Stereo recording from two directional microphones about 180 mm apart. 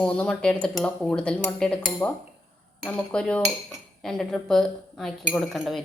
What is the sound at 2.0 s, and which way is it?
Speech, 15° left (ahead or behind).